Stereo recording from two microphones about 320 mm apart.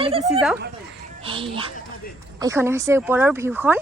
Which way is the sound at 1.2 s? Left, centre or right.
Centre.